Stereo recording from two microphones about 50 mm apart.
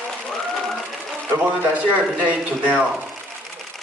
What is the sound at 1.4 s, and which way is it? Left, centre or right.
A man's voice, right.